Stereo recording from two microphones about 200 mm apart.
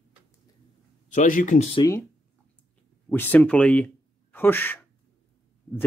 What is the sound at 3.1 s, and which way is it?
Speech, 10° left (ahead or behind).